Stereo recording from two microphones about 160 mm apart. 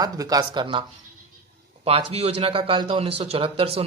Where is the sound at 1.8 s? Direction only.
40° right (ahead or behind).